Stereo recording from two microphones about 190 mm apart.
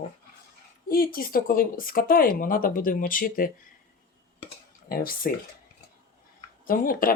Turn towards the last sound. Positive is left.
turn(degrees=50)  # may be behind; listen again after turning